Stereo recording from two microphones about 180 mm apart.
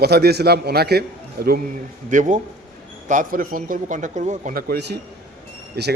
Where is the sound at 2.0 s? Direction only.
45° right (ahead or behind).